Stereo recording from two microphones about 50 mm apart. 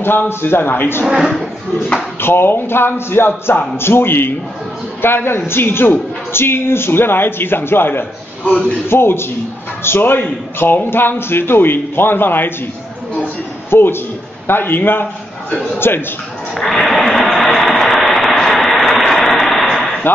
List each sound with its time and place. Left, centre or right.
0.0 s a man's voice: left
1.0 s speech: centre
2.2 s a man's voice: left
13.7 s a man's voice: left
16.5 s a sound: centre